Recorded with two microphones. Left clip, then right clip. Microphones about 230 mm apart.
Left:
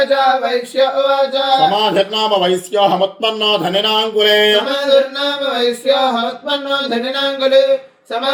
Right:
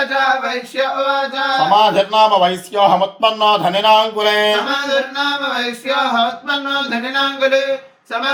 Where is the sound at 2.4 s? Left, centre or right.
Centre.